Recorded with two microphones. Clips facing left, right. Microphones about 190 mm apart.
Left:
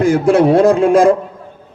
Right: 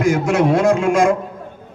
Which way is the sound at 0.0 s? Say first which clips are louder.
Left 5 dB; 30° left (ahead or behind).